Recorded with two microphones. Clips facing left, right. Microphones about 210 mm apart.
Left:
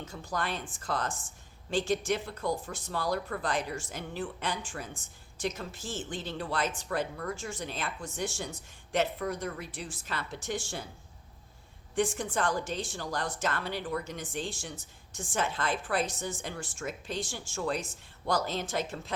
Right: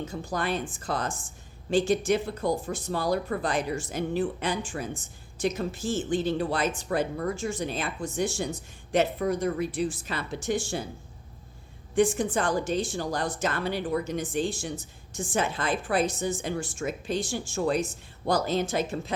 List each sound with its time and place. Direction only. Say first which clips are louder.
0.3 s a woman's voice: right 5 dB; 10° right (ahead or behind)
11.9 s speech: right 6 dB; 15° right (ahead or behind)